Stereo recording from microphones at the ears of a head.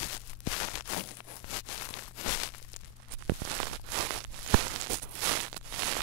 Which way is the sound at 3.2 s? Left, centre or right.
Right.